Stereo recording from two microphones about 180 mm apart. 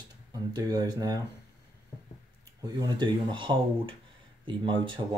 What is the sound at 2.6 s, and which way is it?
Speech, 25° right (ahead or behind).